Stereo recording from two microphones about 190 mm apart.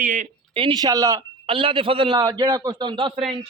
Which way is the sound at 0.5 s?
25° right (ahead or behind).